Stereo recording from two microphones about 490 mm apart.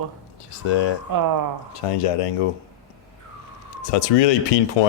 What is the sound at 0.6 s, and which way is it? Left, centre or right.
Speech, left.